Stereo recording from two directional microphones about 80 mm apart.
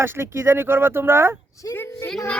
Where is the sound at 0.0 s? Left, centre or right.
Right.